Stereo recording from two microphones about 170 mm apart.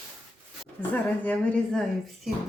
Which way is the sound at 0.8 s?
10° left (ahead or behind).